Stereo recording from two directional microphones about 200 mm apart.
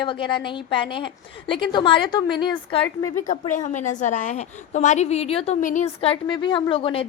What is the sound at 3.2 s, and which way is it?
A woman's voice, 40° left (ahead or behind).